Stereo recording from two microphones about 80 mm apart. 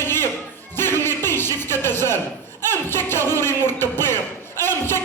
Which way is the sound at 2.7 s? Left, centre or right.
Left.